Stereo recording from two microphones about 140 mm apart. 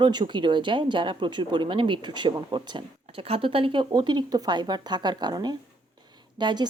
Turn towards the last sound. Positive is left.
turn(degrees=-35)  # may be behind; listen again after turning